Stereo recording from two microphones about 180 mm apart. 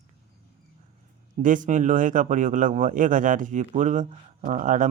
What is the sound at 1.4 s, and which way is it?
A man's voice, 45° right (ahead or behind).